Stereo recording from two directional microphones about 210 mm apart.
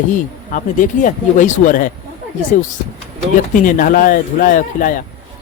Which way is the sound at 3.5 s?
40° left (ahead or behind).